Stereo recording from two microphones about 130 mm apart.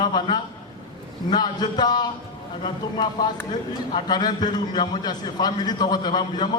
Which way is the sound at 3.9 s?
35° left (ahead or behind).